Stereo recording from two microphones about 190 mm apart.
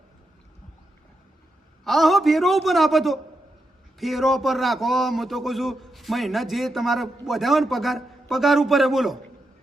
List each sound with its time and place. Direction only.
1.8 s speech: centre (ahead or behind)